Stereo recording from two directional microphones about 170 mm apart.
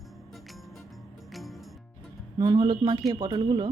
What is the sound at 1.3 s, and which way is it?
Music, centre (ahead or behind).